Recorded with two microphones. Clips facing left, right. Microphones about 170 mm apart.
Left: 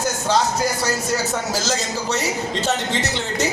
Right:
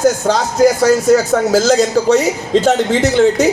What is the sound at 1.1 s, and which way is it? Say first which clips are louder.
A man's voice: right 12 dB; 55° right (ahead or behind).